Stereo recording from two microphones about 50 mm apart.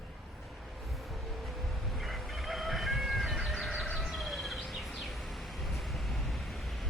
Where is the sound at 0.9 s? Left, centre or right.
Centre.